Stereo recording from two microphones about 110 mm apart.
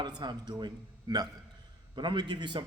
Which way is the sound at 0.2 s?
40° right (ahead or behind).